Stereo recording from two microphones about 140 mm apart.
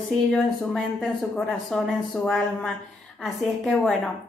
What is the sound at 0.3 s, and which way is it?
A woman's voice, 5° left (ahead or behind).